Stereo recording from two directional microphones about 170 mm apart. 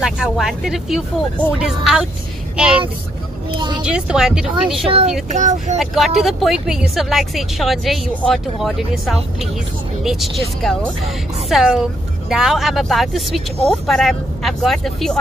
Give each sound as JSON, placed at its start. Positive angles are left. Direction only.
{"t": 0.0, "sound": "speech", "side_deg": 0}
{"t": 3.4, "sound": "speech", "side_deg": -30}
{"t": 3.8, "sound": "speech", "side_deg": -5}
{"t": 4.8, "sound": "speech", "side_deg": -35}
{"t": 5.3, "sound": "speech", "side_deg": -45}
{"t": 5.8, "sound": "speech", "side_deg": 0}